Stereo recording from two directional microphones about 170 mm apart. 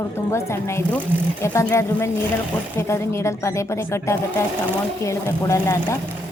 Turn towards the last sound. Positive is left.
turn(degrees=15)  # may be behind; listen again after turning